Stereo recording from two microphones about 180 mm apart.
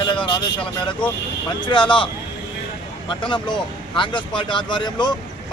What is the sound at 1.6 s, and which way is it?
Speech, 25° left (ahead or behind).